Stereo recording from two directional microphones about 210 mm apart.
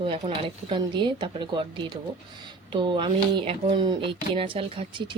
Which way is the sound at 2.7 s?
20° right (ahead or behind).